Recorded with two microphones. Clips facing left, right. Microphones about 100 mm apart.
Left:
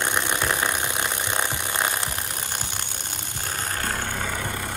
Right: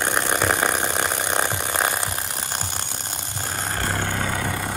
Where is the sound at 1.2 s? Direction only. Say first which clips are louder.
Right 3 dB; 15° right (ahead or behind).